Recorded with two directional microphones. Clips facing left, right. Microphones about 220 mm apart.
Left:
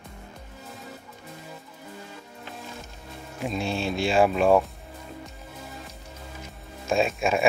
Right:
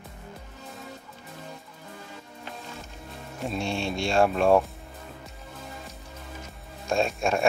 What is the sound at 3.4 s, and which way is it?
Speech, centre (ahead or behind).